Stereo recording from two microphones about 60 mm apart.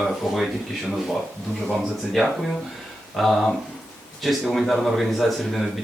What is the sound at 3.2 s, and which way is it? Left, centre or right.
A man's voice, centre.